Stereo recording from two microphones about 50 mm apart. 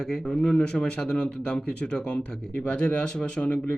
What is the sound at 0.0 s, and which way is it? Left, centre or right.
Speech, centre.